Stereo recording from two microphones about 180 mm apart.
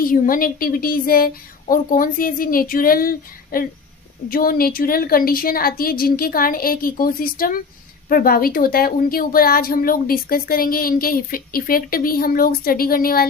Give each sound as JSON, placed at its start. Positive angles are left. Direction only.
{"t": 0.0, "sound": "a woman's voice", "side_deg": 50}